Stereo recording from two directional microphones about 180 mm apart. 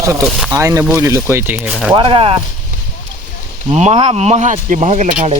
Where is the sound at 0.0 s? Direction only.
15° right (ahead or behind).